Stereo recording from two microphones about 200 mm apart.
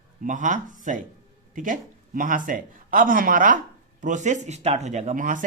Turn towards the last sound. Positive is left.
turn(degrees=-40)  # may be behind; listen again after turning